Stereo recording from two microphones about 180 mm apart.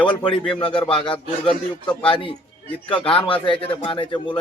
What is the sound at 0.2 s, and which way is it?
Speech, 5° left (ahead or behind).